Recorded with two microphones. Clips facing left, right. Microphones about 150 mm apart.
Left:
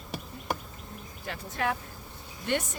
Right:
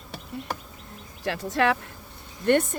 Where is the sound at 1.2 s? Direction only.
90° right.